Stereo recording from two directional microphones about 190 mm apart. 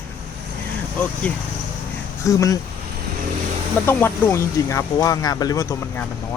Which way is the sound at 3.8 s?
15° left (ahead or behind).